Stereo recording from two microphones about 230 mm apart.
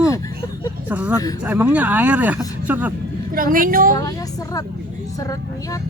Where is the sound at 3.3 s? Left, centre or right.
Right.